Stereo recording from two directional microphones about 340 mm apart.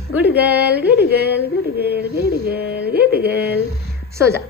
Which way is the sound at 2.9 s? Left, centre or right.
Right.